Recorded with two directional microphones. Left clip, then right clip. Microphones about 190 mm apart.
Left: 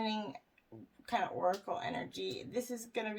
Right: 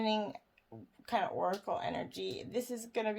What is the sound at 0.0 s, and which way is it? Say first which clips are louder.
Speech: right 4 dB; 35° right (ahead or behind).